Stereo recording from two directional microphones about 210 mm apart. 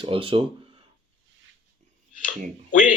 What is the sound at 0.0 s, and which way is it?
Speech, 25° right (ahead or behind).